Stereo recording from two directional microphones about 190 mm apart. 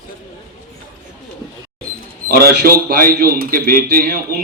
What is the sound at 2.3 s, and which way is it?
A man's voice, 55° right (ahead or behind).